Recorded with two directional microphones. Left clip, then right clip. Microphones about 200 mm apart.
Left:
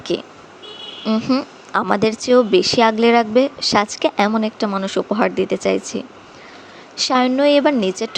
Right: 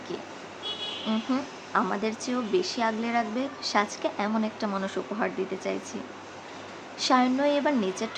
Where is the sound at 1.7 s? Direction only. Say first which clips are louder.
Left 10 dB; 45° left (ahead or behind).